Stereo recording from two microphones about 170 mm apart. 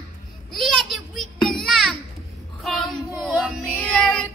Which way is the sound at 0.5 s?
Centre (ahead or behind).